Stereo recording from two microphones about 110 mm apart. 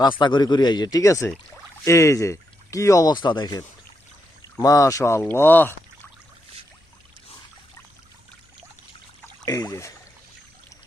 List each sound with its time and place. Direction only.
0.0 s speech: 45° left (ahead or behind)
4.5 s speech: 30° left (ahead or behind)
9.4 s speech: 35° left (ahead or behind)